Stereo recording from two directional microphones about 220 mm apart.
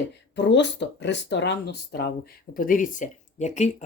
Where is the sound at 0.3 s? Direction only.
50° left (ahead or behind).